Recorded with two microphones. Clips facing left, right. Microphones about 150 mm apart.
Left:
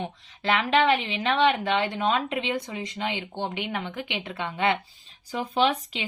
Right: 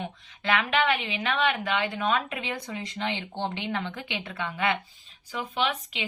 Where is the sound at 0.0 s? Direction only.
30° left (ahead or behind); by 4.4 s 15° left (ahead or behind).